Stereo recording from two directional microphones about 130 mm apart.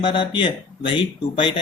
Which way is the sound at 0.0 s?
40° left (ahead or behind).